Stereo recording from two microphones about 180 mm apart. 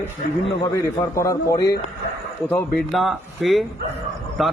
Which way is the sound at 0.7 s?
15° left (ahead or behind).